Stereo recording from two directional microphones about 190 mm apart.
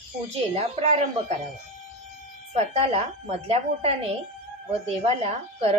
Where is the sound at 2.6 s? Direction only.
35° right (ahead or behind).